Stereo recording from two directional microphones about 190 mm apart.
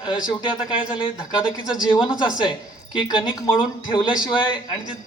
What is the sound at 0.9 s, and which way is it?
Speech, 25° left (ahead or behind).